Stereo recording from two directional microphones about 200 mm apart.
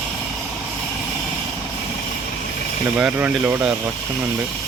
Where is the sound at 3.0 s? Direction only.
5° right (ahead or behind).